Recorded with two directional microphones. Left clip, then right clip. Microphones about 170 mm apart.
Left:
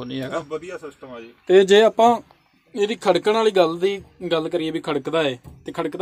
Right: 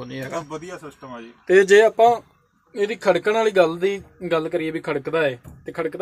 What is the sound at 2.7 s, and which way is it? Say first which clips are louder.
A man's voice: even; 35° left (ahead or behind).